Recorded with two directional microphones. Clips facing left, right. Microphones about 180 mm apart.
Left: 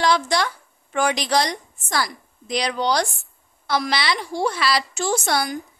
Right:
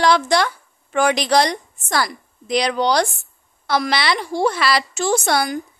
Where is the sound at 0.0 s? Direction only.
65° right (ahead or behind).